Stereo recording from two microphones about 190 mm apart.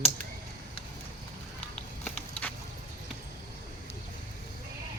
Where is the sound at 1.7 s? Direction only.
5° left (ahead or behind).